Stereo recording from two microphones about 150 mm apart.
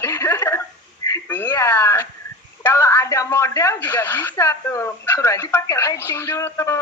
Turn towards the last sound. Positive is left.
turn(degrees=15)  # may be behind; listen again after turning